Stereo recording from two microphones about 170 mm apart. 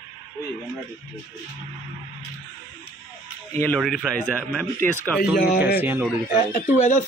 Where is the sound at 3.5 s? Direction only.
10° left (ahead or behind).